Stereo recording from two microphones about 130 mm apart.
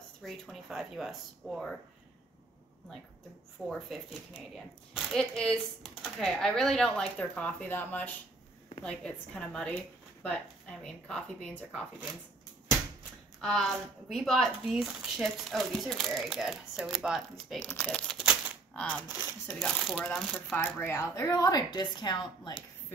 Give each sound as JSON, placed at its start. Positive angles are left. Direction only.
{"t": 0.2, "sound": "speech", "side_deg": 0}
{"t": 3.6, "sound": "speech", "side_deg": 0}
{"t": 13.4, "sound": "speech", "side_deg": 0}
{"t": 18.1, "sound": "typewriter", "side_deg": -5}
{"t": 18.7, "sound": "a sound", "side_deg": 10}
{"t": 19.6, "sound": "speech", "side_deg": 0}
{"t": 20.5, "sound": "speech", "side_deg": 15}
{"t": 21.1, "sound": "a woman's voice", "side_deg": 30}